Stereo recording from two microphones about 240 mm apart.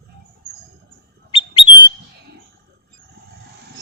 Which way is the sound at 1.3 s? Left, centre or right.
Left.